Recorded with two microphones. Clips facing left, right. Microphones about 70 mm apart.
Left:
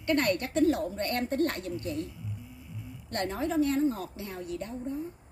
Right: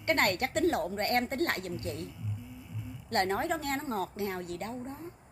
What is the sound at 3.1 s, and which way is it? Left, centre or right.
A woman's voice, right.